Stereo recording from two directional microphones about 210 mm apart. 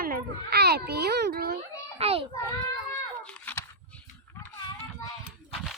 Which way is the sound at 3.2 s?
5° left (ahead or behind).